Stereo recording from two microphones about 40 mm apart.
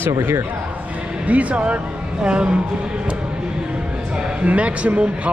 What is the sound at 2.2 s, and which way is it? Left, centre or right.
Speech, right.